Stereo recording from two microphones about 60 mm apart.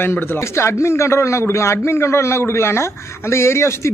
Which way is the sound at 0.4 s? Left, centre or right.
Left.